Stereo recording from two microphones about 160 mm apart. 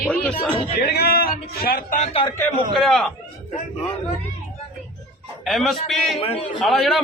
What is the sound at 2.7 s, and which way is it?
Speech, centre (ahead or behind).